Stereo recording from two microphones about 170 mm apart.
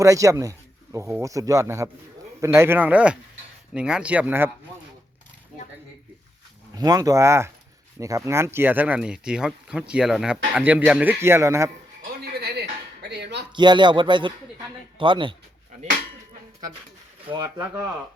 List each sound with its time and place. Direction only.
0.0 s speech: 20° right (ahead or behind)
6.7 s speech: 20° right (ahead or behind)
12.0 s a sound: 70° right (ahead or behind)
13.5 s speech: 25° right (ahead or behind)